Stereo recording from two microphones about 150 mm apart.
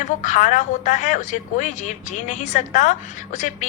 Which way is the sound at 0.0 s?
55° left (ahead or behind).